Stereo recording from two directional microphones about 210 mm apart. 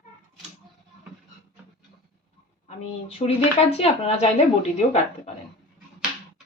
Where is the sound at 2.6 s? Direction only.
25° left (ahead or behind).